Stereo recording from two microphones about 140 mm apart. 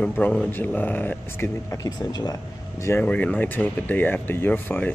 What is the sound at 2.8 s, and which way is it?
Speech, 15° left (ahead or behind).